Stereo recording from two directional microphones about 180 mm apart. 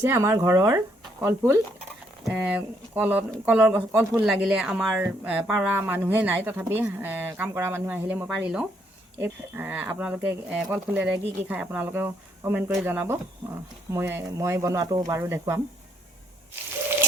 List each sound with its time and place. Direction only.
0.0 s speech: 15° right (ahead or behind)